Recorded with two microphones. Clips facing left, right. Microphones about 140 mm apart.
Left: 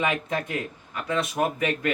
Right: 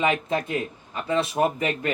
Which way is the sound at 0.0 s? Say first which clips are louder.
Right 3 dB; 25° right (ahead or behind).